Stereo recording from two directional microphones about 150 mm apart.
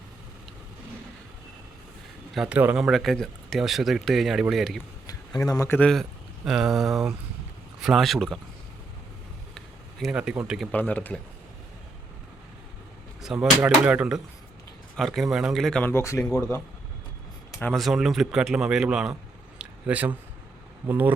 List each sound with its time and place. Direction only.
2.3 s speech: 5° right (ahead or behind)
5.4 s speech: 20° left (ahead or behind)
5.9 s speech: centre (ahead or behind)
9.6 s a sound: centre (ahead or behind)
10.3 s speech: 5° right (ahead or behind)
10.7 s speech: 10° left (ahead or behind)
13.2 s speech: 5° right (ahead or behind)
15.9 s speech: 20° left (ahead or behind)
17.6 s speech: centre (ahead or behind)
19.5 s a sound: 10° right (ahead or behind)
20.8 s speech: 10° right (ahead or behind)